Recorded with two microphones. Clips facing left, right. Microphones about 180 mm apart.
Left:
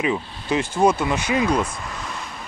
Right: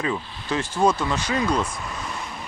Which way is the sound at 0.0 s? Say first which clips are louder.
Left 3 dB; 15° left (ahead or behind).